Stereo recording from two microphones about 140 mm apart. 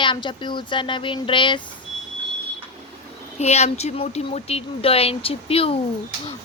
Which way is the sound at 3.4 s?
50° left (ahead or behind).